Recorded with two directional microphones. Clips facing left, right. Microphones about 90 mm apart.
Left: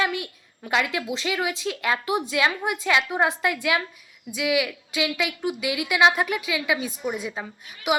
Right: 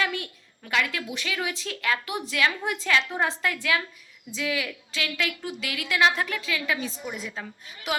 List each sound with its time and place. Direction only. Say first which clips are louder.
0.0 s a woman's voice: left 3 dB; 20° left (ahead or behind)